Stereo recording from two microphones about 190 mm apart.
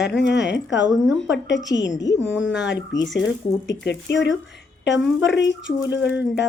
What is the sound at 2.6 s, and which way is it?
A woman's voice, 70° left (ahead or behind).